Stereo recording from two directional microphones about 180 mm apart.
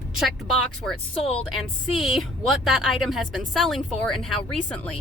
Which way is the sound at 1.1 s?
35° left (ahead or behind).